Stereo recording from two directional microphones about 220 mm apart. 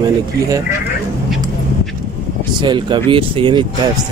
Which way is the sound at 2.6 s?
20° right (ahead or behind).